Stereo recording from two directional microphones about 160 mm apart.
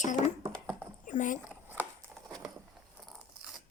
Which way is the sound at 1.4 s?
10° right (ahead or behind).